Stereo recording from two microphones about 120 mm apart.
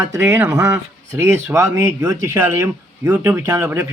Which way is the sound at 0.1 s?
20° right (ahead or behind).